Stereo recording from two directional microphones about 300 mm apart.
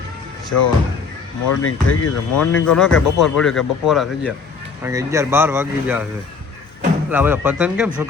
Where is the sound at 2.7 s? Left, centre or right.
Centre.